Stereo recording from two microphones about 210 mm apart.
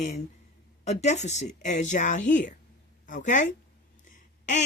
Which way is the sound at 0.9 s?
30° left (ahead or behind).